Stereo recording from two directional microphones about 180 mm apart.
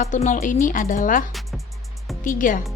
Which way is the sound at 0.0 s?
45° left (ahead or behind).